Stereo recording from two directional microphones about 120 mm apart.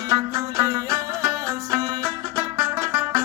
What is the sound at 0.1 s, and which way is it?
Music, 25° right (ahead or behind).